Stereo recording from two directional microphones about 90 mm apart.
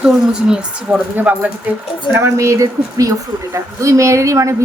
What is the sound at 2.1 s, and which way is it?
A woman's voice, 30° right (ahead or behind).